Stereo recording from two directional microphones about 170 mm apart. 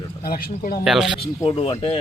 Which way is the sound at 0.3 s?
60° left (ahead or behind).